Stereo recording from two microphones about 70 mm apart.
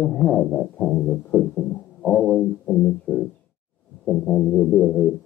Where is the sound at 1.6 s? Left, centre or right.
Centre.